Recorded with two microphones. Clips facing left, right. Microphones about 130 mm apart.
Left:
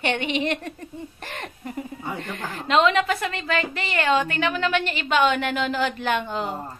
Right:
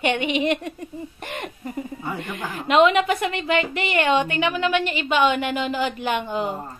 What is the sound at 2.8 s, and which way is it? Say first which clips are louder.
A woman's voice: right 3 dB; 20° right (ahead or behind).